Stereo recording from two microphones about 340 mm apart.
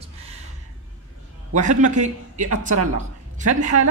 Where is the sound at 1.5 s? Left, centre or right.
Right.